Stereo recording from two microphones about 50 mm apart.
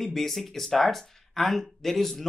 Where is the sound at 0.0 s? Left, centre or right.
Centre.